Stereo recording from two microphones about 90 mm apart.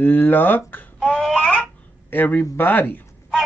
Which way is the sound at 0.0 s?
20° left (ahead or behind).